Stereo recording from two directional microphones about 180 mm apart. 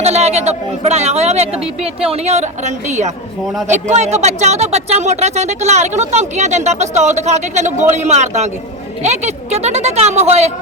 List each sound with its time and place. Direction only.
0.0 s speech: 35° right (ahead or behind)